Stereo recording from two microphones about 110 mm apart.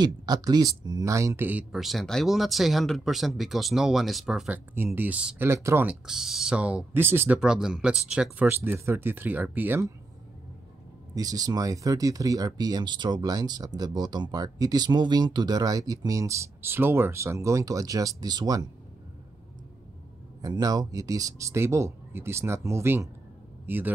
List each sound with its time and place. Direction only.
0.0 s speech: 40° right (ahead or behind); by 1.8 s 15° right (ahead or behind)
1.8 s speech: centre (ahead or behind)
4.7 s speech: 20° right (ahead or behind)
5.9 s speech: 5° right (ahead or behind)
7.3 s speech: 5° right (ahead or behind)
8.5 s speech: 20° right (ahead or behind)
11.1 s speech: 35° right (ahead or behind)
20.4 s a man's voice: 35° right (ahead or behind); by 23.9 s 20° right (ahead or behind)